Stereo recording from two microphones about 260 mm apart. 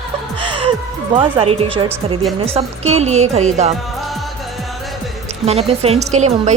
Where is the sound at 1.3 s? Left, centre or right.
Centre.